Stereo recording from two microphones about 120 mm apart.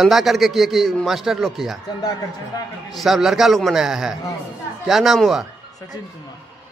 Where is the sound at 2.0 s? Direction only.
30° left (ahead or behind).